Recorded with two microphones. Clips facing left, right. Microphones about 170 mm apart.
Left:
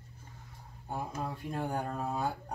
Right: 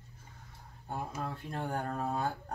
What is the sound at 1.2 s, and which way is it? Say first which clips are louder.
Speech: left 2 dB; 10° left (ahead or behind).